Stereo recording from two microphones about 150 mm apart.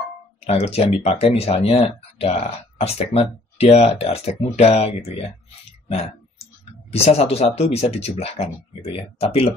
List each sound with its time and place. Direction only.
0.5 s speech: 45° left (ahead or behind)
5.9 s a sound: 45° left (ahead or behind)
6.9 s speech: 40° left (ahead or behind)